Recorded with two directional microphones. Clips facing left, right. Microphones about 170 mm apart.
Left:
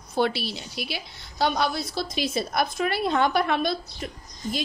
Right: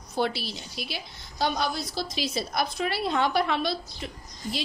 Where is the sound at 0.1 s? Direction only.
65° left (ahead or behind).